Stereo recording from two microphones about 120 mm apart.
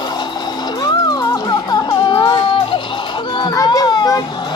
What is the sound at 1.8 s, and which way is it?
Music, 45° left (ahead or behind).